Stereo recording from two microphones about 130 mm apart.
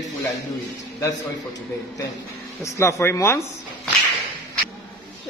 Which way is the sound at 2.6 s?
20° left (ahead or behind).